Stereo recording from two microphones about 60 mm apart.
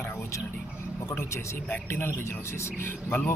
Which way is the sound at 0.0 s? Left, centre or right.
Left.